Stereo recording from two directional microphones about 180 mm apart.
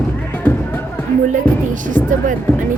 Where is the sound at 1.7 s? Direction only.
45° right (ahead or behind).